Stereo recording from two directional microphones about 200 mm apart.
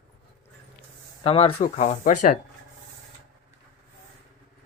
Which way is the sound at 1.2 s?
30° left (ahead or behind).